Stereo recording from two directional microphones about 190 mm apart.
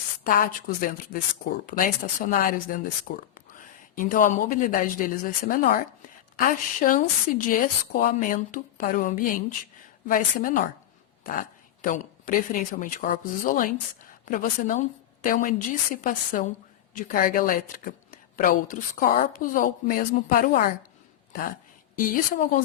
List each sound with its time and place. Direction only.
0.3 s a woman's voice: 50° left (ahead or behind)
21.9 s speech: 45° left (ahead or behind)